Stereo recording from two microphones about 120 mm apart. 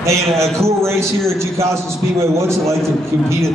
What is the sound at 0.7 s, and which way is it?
A man's voice, 25° right (ahead or behind).